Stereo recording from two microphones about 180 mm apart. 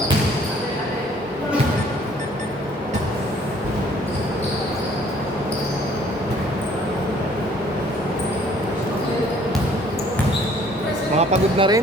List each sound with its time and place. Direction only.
11.2 s speech: 35° right (ahead or behind)